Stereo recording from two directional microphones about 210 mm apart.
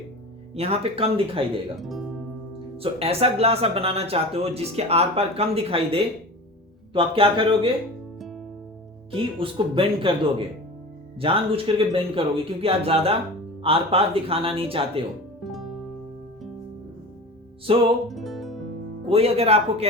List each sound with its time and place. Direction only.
0.5 s speech: 30° right (ahead or behind)
1.8 s music: centre (ahead or behind)
2.7 s speech: 30° right (ahead or behind)
9.1 s speech: 25° right (ahead or behind)
15.4 s music: centre (ahead or behind)
17.7 s speech: 25° right (ahead or behind)
18.1 s music: centre (ahead or behind)
19.0 s speech: 30° right (ahead or behind)